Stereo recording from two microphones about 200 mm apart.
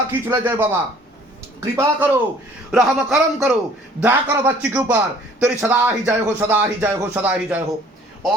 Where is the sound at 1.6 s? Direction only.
15° right (ahead or behind).